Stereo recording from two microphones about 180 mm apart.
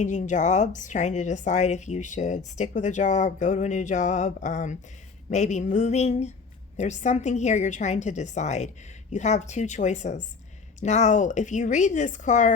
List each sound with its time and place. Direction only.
0.0 s a woman's voice: 45° left (ahead or behind)